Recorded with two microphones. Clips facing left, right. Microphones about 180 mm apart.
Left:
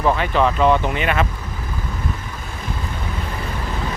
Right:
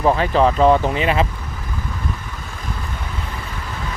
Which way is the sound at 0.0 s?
30° right (ahead or behind).